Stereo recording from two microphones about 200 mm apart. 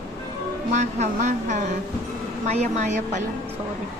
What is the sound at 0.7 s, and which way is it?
Speech, 35° right (ahead or behind).